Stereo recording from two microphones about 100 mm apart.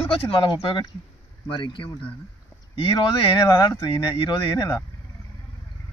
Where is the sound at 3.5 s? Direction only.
45° left (ahead or behind).